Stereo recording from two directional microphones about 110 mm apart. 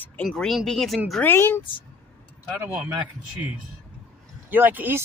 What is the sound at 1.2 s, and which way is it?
Speech, 20° left (ahead or behind).